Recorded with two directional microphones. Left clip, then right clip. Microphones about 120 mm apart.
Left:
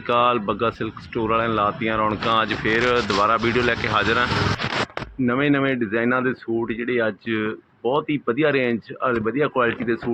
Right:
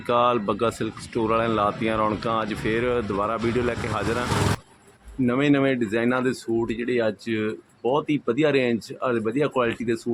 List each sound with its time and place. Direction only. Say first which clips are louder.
0.1 s speech: left 2 dB; 10° right (ahead or behind)